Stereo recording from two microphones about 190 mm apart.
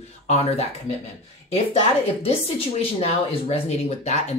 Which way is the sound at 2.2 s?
30° left (ahead or behind).